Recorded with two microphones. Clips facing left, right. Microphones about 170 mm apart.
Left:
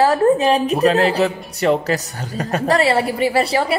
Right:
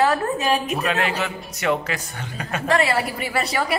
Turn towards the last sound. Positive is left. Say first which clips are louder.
# left 6 dB
turn(degrees=30)  # may be behind; listen again after turning